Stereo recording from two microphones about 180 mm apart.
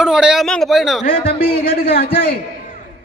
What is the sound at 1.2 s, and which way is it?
Speech, 55° left (ahead or behind).